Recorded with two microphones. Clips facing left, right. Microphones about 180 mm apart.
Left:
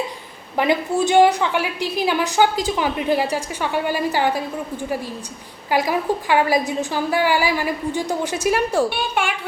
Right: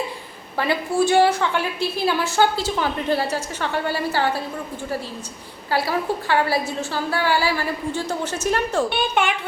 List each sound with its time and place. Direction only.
0.5 s a woman's voice: 15° left (ahead or behind)
5.7 s a woman's voice: 15° left (ahead or behind)